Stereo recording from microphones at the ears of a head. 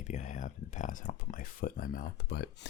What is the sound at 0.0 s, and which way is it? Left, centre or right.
Speech, left.